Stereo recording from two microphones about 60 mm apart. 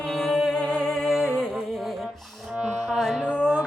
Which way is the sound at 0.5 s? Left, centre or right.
Centre.